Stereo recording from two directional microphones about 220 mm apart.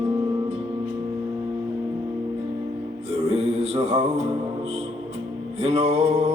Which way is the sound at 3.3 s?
30° right (ahead or behind).